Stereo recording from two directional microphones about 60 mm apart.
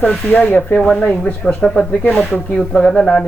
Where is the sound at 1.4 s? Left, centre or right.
Centre.